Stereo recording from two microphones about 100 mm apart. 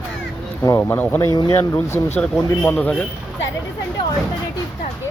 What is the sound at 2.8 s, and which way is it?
Speech, 15° left (ahead or behind).